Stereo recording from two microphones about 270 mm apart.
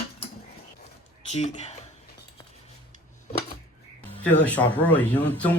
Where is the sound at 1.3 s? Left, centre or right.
Left.